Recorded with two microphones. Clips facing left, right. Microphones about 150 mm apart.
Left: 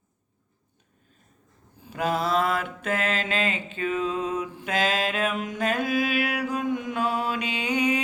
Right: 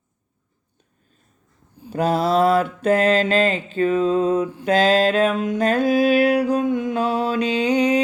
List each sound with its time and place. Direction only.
1.9 s mantra: 35° right (ahead or behind)
7.4 s music: 35° right (ahead or behind)